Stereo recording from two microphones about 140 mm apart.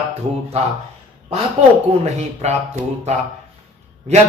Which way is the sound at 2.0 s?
55° right (ahead or behind).